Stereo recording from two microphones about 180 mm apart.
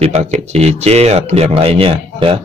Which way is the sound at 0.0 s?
35° right (ahead or behind).